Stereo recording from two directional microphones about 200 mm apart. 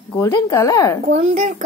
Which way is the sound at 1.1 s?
35° right (ahead or behind).